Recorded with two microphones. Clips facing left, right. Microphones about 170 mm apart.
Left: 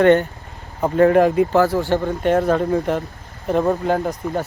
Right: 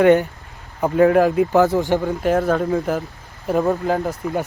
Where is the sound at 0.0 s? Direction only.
5° right (ahead or behind).